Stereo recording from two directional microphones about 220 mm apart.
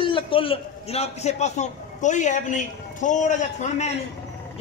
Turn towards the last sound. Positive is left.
turn(degrees=30)  # may be behind; listen again after turning